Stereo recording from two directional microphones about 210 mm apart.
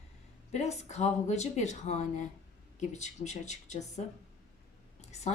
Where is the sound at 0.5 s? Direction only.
35° left (ahead or behind).